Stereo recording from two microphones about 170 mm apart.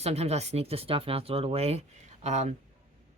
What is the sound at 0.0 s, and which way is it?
Speech, 40° right (ahead or behind).